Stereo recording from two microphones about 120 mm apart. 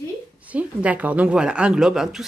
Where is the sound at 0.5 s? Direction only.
10° right (ahead or behind).